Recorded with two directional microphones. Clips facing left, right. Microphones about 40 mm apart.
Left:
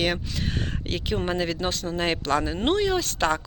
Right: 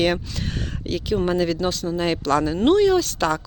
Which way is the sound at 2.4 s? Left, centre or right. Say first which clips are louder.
Right 7 dB; centre.